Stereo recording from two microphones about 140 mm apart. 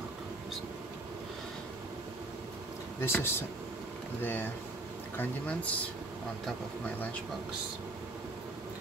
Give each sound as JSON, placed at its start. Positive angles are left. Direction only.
{"t": 3.0, "sound": "speech", "side_deg": 15}